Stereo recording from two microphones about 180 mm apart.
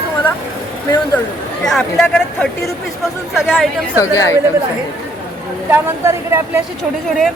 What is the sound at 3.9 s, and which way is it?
Speech, 15° left (ahead or behind).